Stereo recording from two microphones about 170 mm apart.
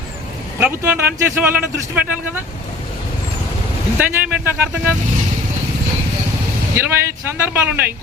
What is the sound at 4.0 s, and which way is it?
Speech, 10° right (ahead or behind).